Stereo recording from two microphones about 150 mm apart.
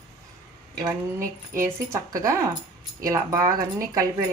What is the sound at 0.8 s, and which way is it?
Speech, 20° right (ahead or behind).